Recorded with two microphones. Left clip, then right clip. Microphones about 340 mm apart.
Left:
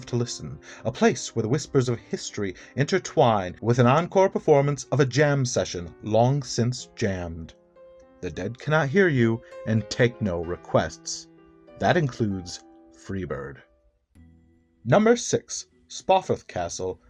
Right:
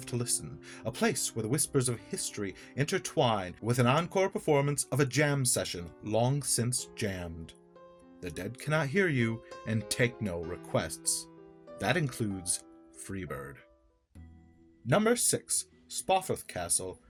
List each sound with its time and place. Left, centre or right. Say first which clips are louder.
0.0 s speech: left 6 dB; right
14.8 s speech: left 8 dB; right